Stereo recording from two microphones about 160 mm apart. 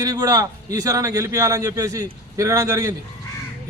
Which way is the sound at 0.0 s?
25° right (ahead or behind).